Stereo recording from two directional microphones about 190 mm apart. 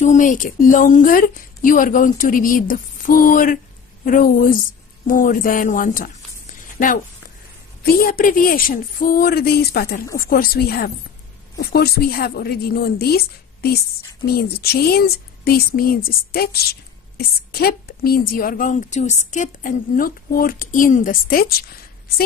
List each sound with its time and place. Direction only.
0.0 s a woman's voice: 40° left (ahead or behind)
7.8 s a woman's voice: 50° left (ahead or behind)
17.5 s a woman's voice: 55° left (ahead or behind)